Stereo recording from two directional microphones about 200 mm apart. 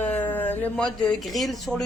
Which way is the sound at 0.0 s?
10° left (ahead or behind).